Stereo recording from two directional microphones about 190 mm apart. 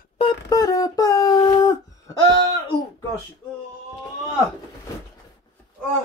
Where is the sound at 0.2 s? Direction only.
20° left (ahead or behind).